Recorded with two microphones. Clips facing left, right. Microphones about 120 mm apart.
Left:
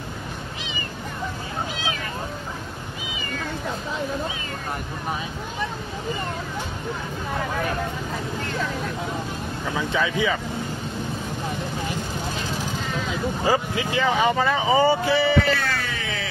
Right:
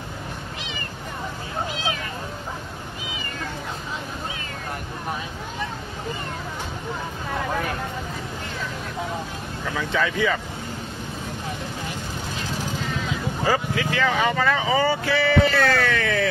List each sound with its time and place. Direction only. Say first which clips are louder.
9.8 s speech: even; 10° left (ahead or behind)
13.5 s speech: even; 20° left (ahead or behind)
15.6 s a sound: right 7 dB; 60° right (ahead or behind)